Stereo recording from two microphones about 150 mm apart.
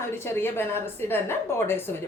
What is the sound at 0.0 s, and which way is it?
A woman's voice, 15° left (ahead or behind).